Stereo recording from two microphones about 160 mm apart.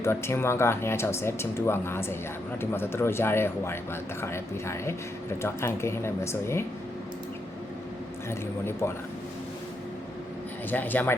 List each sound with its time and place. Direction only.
0.0 s speech: 15° left (ahead or behind)
8.3 s speech: 15° left (ahead or behind)
10.7 s speech: 10° left (ahead or behind)